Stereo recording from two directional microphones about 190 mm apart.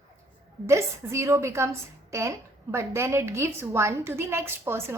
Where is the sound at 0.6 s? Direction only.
15° right (ahead or behind).